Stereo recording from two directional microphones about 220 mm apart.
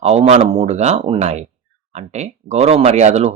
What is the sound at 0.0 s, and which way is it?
Speech, 30° right (ahead or behind).